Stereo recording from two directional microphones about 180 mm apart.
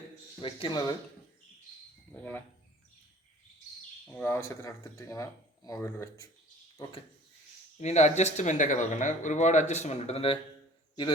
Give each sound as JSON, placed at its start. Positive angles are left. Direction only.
{"t": 0.4, "sound": "speech", "side_deg": 30}
{"t": 4.0, "sound": "speech", "side_deg": 10}
{"t": 7.8, "sound": "speech", "side_deg": 40}